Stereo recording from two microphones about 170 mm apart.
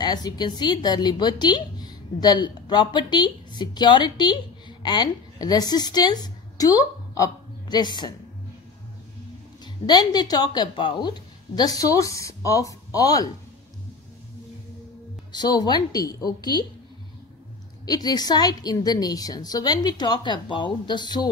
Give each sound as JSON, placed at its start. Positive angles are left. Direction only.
{"t": 0.0, "sound": "a woman's voice", "side_deg": 25}
{"t": 9.8, "sound": "a woman's voice", "side_deg": 25}
{"t": 15.3, "sound": "a woman's voice", "side_deg": 25}
{"t": 17.8, "sound": "a woman's voice", "side_deg": 25}